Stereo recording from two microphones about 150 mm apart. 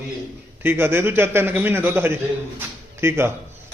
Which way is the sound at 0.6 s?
15° right (ahead or behind).